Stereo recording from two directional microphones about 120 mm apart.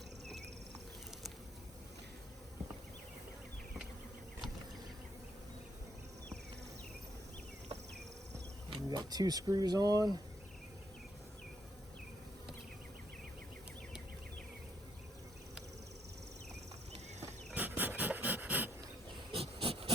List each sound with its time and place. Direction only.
8.7 s speech: 35° right (ahead or behind)
17.5 s dog: 15° right (ahead or behind)
19.3 s hiss: 55° right (ahead or behind)